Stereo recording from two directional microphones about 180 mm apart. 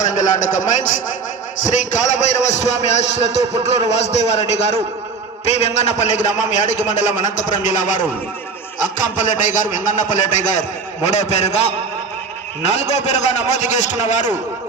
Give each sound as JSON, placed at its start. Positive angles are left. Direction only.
{"t": 0.0, "sound": "a man's voice", "side_deg": 45}
{"t": 9.2, "sound": "a man's voice", "side_deg": 45}
{"t": 12.7, "sound": "a man's voice", "side_deg": 40}